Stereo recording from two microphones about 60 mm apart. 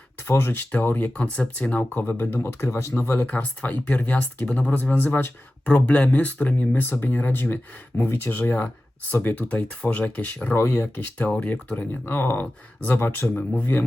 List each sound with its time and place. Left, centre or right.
0.2 s speech: left
0.7 s speech: left
1.9 s speech: left
2.5 s speech: left
2.9 s speech: left
5.6 s speech: centre
10.5 s speech: left
11.3 s speech: left
11.9 s speech: left